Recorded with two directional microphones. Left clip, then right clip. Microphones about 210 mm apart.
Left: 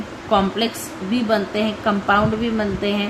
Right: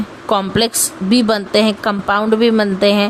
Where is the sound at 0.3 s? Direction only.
55° right (ahead or behind).